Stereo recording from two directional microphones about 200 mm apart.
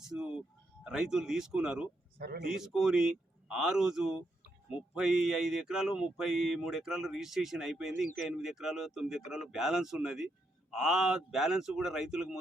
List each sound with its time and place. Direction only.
0.1 s a sound: 5° right (ahead or behind)
0.9 s speech: 5° right (ahead or behind)
2.1 s speech: 50° right (ahead or behind)
2.4 s speech: centre (ahead or behind)